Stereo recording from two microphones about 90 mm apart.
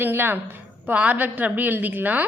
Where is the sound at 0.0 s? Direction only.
25° right (ahead or behind).